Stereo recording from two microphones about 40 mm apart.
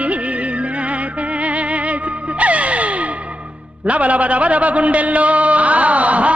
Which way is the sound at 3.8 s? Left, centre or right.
Right.